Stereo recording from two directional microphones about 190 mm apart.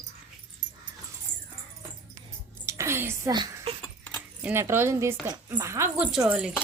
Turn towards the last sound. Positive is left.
turn(degrees=-5)  # may be behind; listen again after turning